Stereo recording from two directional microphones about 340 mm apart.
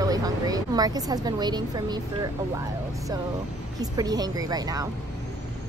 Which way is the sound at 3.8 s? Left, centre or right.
Centre.